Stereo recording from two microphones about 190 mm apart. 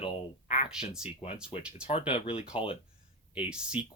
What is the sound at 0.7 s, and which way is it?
Speech, 5° right (ahead or behind).